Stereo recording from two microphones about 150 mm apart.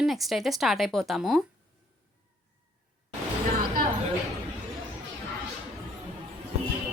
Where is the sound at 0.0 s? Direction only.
Centre (ahead or behind).